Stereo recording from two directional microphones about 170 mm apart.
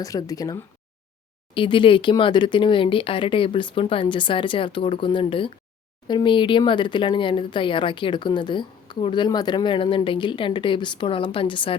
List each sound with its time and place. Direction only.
0.0 s speech: 20° left (ahead or behind)